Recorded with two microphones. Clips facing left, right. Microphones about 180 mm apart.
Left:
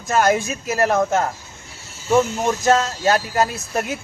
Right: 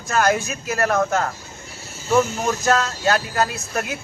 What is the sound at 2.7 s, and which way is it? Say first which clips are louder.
A man's voice: left 3 dB; 25° left (ahead or behind).